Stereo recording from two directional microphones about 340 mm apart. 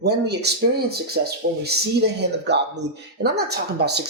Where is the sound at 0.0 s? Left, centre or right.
Right.